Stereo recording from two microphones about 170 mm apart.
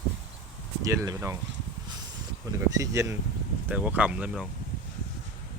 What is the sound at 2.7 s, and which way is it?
Speech, 20° right (ahead or behind).